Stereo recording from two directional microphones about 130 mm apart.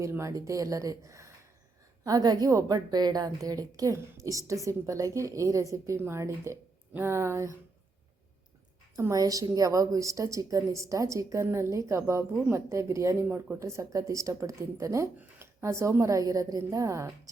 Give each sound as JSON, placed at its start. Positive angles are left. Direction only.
{"t": 0.0, "sound": "a woman's voice", "side_deg": -20}
{"t": 9.0, "sound": "a woman's voice", "side_deg": -25}
{"t": 13.2, "sound": "speech", "side_deg": -10}
{"t": 13.6, "sound": "a woman's voice", "side_deg": -20}